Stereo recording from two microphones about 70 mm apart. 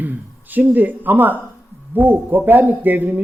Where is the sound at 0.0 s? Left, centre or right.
Right.